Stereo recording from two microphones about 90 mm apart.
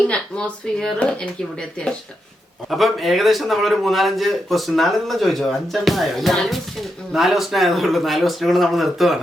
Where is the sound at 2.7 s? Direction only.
Centre (ahead or behind).